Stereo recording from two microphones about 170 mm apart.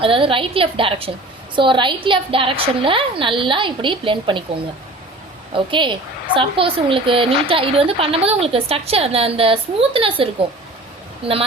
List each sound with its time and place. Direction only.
0.0 s a woman's voice: 30° right (ahead or behind)
5.5 s a woman's voice: 30° right (ahead or behind)